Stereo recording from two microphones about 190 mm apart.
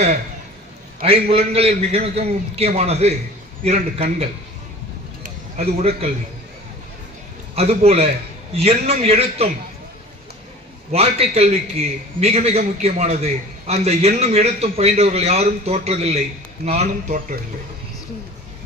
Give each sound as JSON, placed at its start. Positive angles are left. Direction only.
{"t": 1.3, "sound": "a man's voice", "side_deg": -30}
{"t": 5.2, "sound": "a sound", "side_deg": -35}
{"t": 7.5, "sound": "a man's voice", "side_deg": -35}
{"t": 10.9, "sound": "a man's voice", "side_deg": -30}